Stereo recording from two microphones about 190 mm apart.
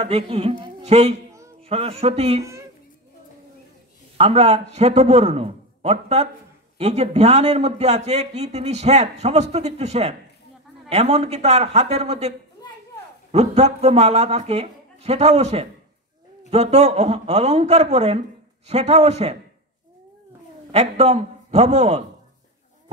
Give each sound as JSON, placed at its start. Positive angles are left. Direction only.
{"t": 0.0, "sound": "a man's voice", "side_deg": -30}
{"t": 4.2, "sound": "a man's voice", "side_deg": -35}
{"t": 20.7, "sound": "a man's voice", "side_deg": -35}